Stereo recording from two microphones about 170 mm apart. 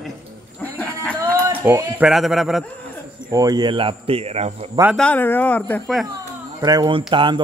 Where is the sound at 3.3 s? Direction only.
20° right (ahead or behind); by 4.7 s 40° right (ahead or behind).